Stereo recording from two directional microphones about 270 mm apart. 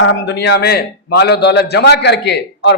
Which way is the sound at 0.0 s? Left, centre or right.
Left.